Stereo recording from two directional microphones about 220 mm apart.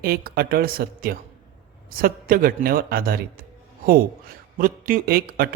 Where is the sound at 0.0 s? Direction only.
45° right (ahead or behind).